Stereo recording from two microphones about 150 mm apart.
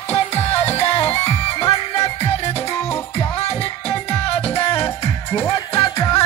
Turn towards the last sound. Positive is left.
turn(degrees=40)  # may be behind; listen again after turning